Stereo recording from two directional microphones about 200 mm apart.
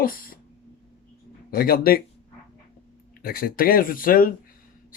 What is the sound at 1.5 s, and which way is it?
Speech, 50° left (ahead or behind).